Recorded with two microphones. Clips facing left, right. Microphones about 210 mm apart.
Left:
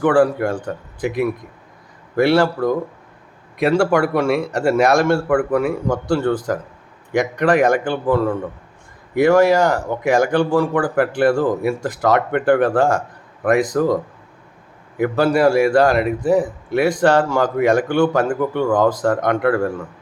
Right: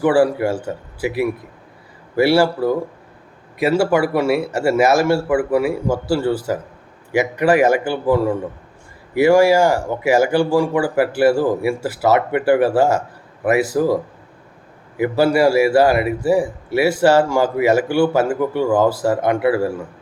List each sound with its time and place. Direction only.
0.0 s a man's voice: 10° right (ahead or behind)